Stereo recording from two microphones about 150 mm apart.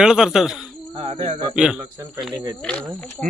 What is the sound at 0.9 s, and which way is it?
Speech, 45° right (ahead or behind).